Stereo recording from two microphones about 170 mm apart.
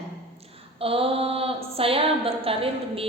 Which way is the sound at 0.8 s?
35° right (ahead or behind).